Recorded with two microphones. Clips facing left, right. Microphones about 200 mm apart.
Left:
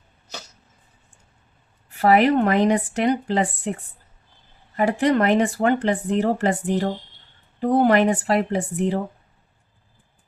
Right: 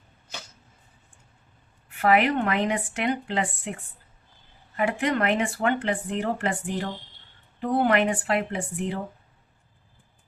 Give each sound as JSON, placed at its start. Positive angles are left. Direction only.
{"t": 1.9, "sound": "speech", "side_deg": 35}
{"t": 4.8, "sound": "speech", "side_deg": 35}